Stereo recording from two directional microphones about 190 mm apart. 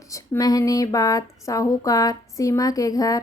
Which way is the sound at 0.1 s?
20° left (ahead or behind).